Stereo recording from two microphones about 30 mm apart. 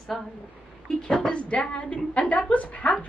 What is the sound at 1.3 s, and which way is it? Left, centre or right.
A woman's voice, left.